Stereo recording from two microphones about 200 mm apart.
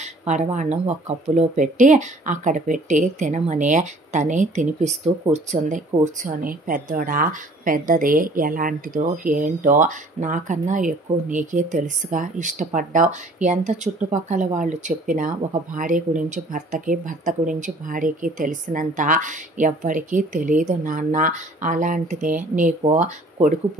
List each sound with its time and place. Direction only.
0.0 s a woman's voice: 35° right (ahead or behind)